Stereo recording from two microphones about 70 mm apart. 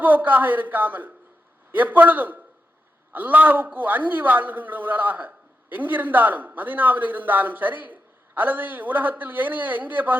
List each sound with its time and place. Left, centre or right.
0.0 s a man's voice: right